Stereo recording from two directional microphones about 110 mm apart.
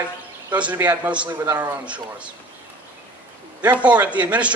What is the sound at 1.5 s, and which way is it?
Speech, 25° right (ahead or behind).